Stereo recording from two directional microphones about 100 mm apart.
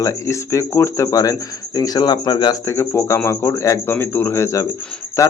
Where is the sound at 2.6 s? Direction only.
30° left (ahead or behind).